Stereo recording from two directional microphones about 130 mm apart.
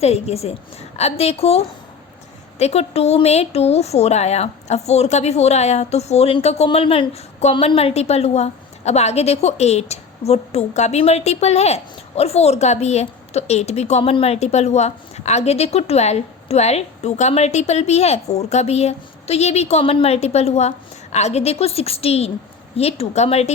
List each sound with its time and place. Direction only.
0.0 s a woman's voice: 55° left (ahead or behind)
7.5 s a woman's voice: 45° left (ahead or behind)